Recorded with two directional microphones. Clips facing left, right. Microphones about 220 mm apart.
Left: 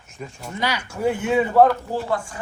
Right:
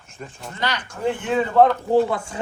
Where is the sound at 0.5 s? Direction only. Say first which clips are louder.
Left 2 dB; 10° left (ahead or behind).